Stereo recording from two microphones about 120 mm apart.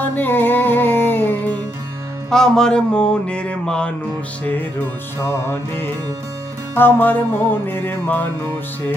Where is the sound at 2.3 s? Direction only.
5° left (ahead or behind).